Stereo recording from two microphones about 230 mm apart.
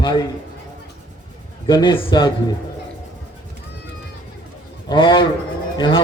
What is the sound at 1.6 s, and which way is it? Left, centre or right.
Speech, centre.